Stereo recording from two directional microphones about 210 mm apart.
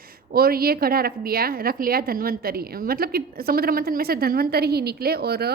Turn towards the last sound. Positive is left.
turn(degrees=-50)  # may be behind; listen again after turning